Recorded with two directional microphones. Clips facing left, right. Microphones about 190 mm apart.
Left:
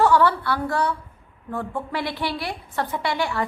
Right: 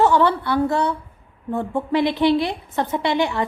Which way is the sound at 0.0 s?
20° right (ahead or behind).